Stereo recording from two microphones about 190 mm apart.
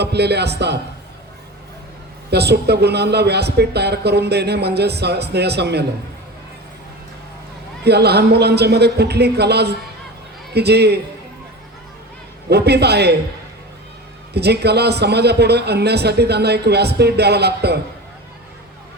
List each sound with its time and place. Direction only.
0.0 s speech: 60° right (ahead or behind)
2.3 s speech: 60° right (ahead or behind)
7.9 s speech: 60° right (ahead or behind)
12.5 s speech: 60° right (ahead or behind)
14.3 s speech: 60° right (ahead or behind)